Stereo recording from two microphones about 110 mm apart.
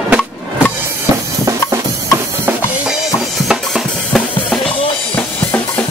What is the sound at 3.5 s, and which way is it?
Drum kit, centre (ahead or behind).